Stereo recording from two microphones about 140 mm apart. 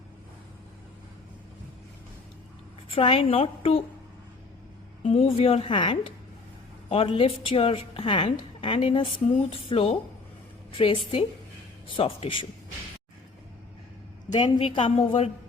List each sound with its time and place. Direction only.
2.9 s a woman's voice: 40° left (ahead or behind)
5.0 s a woman's voice: 45° left (ahead or behind)
14.3 s a woman's voice: 35° left (ahead or behind)